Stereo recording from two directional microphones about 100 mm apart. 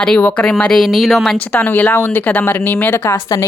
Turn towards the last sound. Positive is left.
turn(degrees=20)  # may be behind; listen again after turning